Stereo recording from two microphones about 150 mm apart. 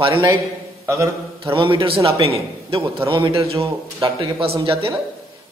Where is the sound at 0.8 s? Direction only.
20° right (ahead or behind).